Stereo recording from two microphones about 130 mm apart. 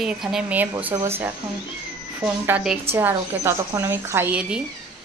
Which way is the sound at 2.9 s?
20° right (ahead or behind).